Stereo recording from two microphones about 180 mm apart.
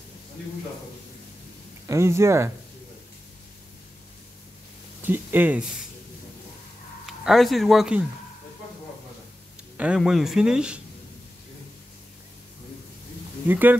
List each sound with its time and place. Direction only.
1.9 s speech: 15° right (ahead or behind)
5.0 s speech: 10° right (ahead or behind)
7.1 s speech: centre (ahead or behind)
9.8 s speech: 5° right (ahead or behind)
13.5 s speech: 10° right (ahead or behind)